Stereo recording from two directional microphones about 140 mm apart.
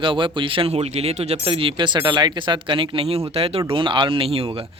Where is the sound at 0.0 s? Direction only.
35° right (ahead or behind).